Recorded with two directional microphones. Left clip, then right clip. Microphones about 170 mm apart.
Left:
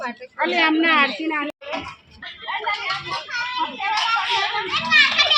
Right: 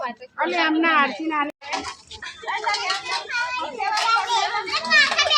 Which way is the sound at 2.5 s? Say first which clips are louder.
Right 1 dB; centre (ahead or behind).